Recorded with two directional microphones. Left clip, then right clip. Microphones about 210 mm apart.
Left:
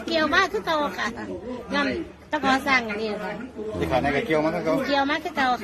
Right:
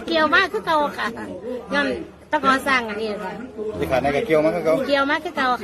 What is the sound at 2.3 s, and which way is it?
Speech, 15° right (ahead or behind).